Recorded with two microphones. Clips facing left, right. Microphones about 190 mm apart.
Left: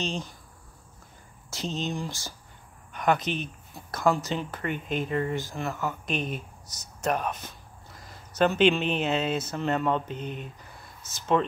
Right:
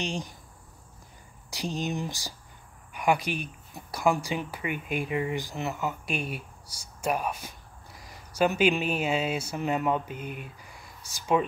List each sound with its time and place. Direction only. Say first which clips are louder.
0.0 s speech: left 1 dB; 15° right (ahead or behind)
1.5 s speech: even; 15° right (ahead or behind)